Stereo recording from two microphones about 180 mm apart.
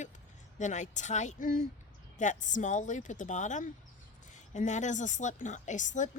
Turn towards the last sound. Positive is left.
turn(degrees=45)  # may be behind; listen again after turning